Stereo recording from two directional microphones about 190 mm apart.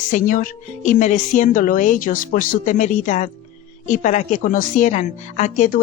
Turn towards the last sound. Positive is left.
turn(degrees=40)  # may be behind; listen again after turning